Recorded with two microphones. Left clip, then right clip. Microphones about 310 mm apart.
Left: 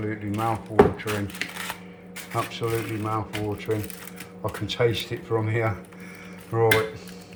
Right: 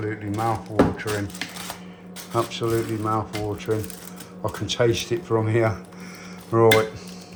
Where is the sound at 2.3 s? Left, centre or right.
Centre.